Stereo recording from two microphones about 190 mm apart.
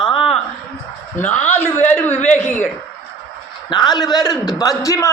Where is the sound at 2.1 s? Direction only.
40° left (ahead or behind).